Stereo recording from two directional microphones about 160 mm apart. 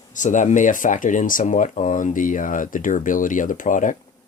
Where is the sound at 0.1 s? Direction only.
50° left (ahead or behind).